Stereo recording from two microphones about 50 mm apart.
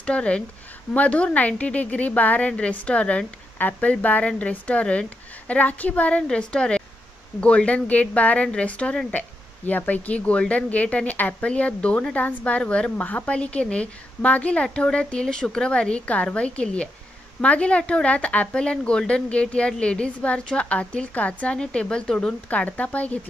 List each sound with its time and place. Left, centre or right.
0.0 s speech: left
3.5 s speech: left
9.7 s speech: left
12.9 s speech: left; by 22.3 s centre
22.5 s speech: left